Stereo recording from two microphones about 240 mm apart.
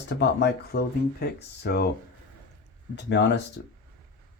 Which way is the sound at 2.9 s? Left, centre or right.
Left.